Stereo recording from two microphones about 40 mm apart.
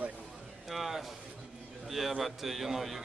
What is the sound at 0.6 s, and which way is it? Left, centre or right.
A man's voice, centre.